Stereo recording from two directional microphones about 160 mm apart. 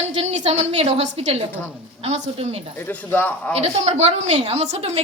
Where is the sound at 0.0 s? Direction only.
40° right (ahead or behind).